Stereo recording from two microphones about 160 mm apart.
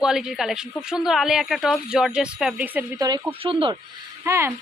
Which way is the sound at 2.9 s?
25° right (ahead or behind).